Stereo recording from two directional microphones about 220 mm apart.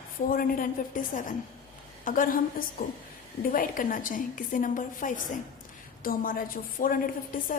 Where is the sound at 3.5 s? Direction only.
40° left (ahead or behind).